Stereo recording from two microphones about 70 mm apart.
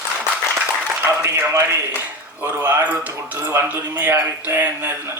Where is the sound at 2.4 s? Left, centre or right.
Right.